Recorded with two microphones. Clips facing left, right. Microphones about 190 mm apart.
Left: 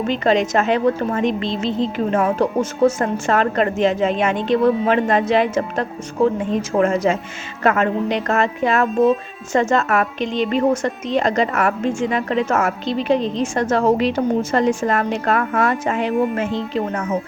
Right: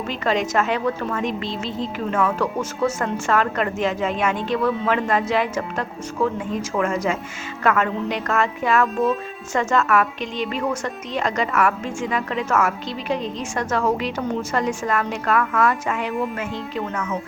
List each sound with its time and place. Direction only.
0.1 s a woman's voice: 20° left (ahead or behind)